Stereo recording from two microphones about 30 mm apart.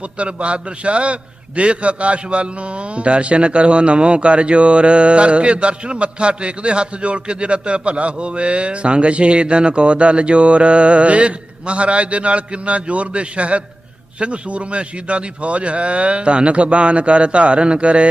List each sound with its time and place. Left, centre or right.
0.0 s a man's voice: right